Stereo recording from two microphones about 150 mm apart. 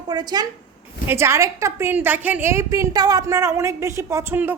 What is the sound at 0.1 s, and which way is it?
Speech, 25° right (ahead or behind).